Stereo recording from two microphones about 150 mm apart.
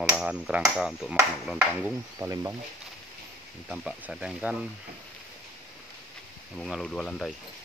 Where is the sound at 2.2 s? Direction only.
20° right (ahead or behind).